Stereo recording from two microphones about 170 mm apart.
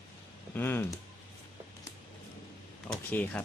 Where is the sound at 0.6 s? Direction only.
15° left (ahead or behind).